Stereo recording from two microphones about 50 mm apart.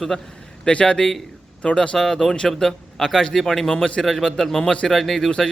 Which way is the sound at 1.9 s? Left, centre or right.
Centre.